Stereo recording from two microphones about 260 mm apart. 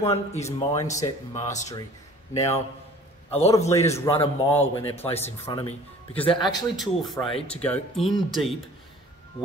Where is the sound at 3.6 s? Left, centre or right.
Centre.